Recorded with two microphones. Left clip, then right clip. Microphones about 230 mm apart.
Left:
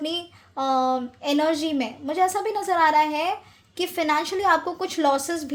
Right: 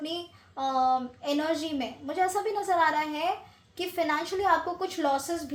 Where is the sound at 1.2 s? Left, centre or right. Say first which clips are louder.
Left 6 dB; left.